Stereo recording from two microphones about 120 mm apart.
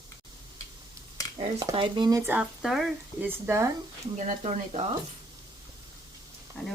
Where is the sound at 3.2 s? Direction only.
20° right (ahead or behind).